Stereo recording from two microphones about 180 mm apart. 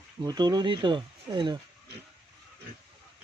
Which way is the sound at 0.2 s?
20° right (ahead or behind).